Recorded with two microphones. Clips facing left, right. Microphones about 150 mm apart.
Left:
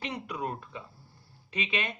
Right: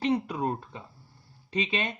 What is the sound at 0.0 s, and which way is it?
Speech, 30° right (ahead or behind).